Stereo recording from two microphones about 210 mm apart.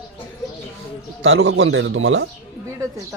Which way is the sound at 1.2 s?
75° right (ahead or behind).